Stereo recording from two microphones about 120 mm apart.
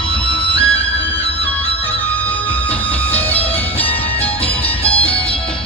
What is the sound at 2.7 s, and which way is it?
Music, 15° left (ahead or behind).